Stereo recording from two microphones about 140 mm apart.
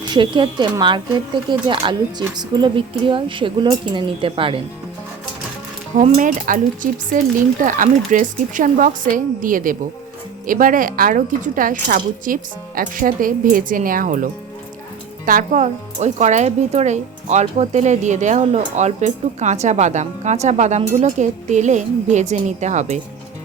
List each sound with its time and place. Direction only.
0.1 s speech: 35° right (ahead or behind)
5.9 s speech: 65° right (ahead or behind)
15.3 s speech: 70° right (ahead or behind)